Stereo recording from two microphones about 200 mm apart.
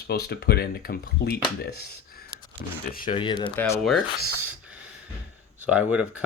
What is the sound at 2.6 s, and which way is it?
Speech, 50° left (ahead or behind).